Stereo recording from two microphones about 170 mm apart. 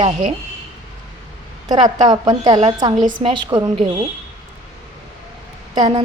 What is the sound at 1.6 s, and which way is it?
A woman's voice, 25° right (ahead or behind).